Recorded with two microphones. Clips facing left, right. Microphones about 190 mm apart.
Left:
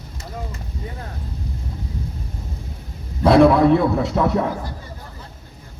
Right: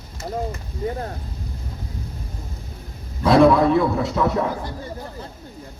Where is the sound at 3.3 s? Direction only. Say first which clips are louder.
Left 2 dB; 60° left (ahead or behind).